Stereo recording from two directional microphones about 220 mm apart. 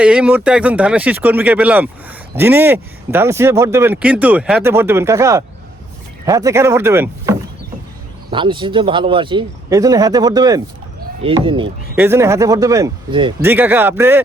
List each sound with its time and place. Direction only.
0.0 s speech: 5° right (ahead or behind)
8.3 s speech: 20° right (ahead or behind)
11.9 s speech: 10° right (ahead or behind)
13.4 s speech: 10° right (ahead or behind)